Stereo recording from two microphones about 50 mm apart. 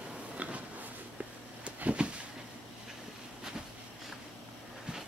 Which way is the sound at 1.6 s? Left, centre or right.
Right.